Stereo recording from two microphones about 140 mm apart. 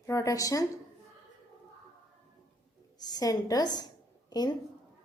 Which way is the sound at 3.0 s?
30° left (ahead or behind).